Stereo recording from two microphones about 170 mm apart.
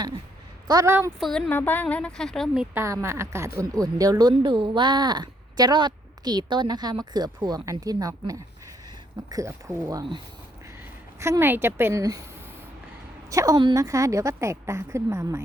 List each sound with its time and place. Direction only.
0.7 s a woman's voice: 20° right (ahead or behind)
1.2 s a woman's voice: 5° left (ahead or behind)
2.7 s a woman's voice: 15° right (ahead or behind)
11.2 s a woman's voice: 15° right (ahead or behind)
13.3 s a woman's voice: 20° right (ahead or behind)